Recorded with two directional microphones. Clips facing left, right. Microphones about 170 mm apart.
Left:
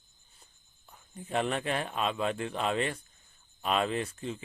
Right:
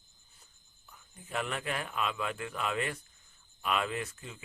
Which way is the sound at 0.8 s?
30° left (ahead or behind).